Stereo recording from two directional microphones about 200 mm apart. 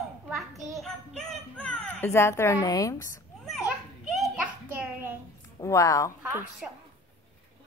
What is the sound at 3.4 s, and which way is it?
Children playing, centre (ahead or behind).